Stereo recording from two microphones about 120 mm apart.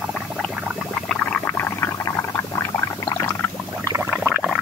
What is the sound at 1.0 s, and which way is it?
Whale vocalization, 10° left (ahead or behind).